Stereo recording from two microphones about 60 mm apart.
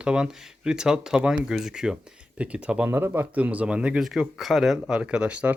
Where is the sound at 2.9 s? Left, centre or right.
Right.